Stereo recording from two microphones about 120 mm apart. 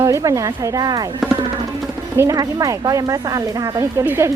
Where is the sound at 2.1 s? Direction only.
30° right (ahead or behind).